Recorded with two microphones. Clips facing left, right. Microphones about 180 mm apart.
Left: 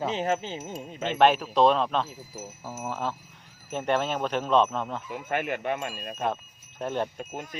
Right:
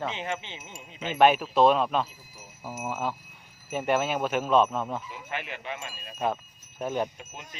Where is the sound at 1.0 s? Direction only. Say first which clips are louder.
Even; 5° right (ahead or behind).